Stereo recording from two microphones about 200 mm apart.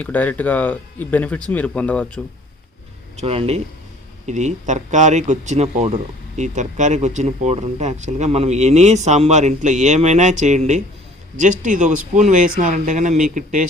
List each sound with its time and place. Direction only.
0.0 s speech: 10° left (ahead or behind)
3.2 s speech: 30° right (ahead or behind)